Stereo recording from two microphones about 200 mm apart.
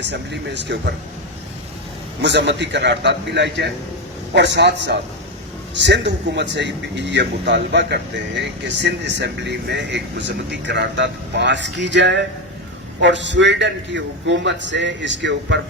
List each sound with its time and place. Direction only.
0.0 s speech: 60° right (ahead or behind)
2.2 s speech: 60° right (ahead or behind)